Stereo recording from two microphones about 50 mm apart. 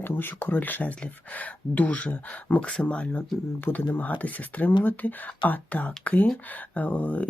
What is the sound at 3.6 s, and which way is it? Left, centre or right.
Speech, left.